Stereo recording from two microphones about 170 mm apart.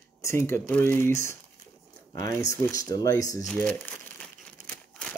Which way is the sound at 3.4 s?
5° left (ahead or behind).